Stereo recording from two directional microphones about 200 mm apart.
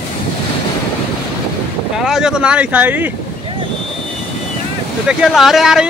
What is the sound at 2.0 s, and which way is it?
Speech, 5° right (ahead or behind).